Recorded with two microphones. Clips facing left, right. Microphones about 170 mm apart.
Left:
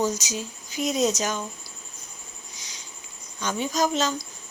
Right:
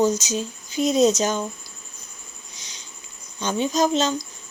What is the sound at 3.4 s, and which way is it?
Speech, 25° right (ahead or behind).